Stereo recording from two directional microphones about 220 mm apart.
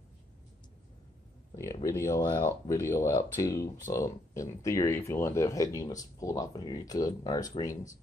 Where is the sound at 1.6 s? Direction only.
15° left (ahead or behind).